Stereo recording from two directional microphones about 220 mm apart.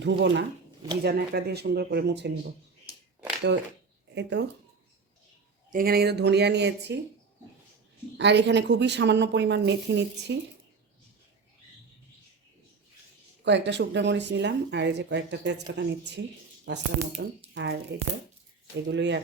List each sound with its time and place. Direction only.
0.0 s speech: 50° right (ahead or behind)
4.1 s speech: 50° right (ahead or behind)
5.7 s speech: 45° right (ahead or behind)
8.2 s speech: 50° right (ahead or behind)
13.4 s speech: 50° right (ahead or behind)
18.9 s speech: 50° right (ahead or behind)